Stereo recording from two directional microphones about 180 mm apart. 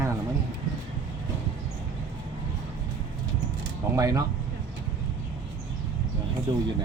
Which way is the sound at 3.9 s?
20° right (ahead or behind).